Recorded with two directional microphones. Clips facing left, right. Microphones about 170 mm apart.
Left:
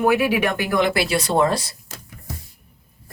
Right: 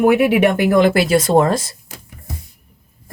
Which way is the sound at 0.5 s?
45° right (ahead or behind).